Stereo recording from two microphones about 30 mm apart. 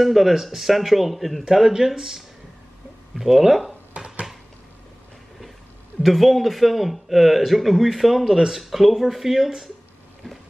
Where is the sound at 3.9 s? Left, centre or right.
Right.